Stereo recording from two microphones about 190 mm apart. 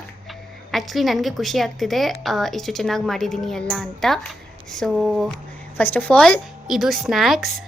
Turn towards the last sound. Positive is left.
turn(degrees=0)  # may be behind; listen again after turning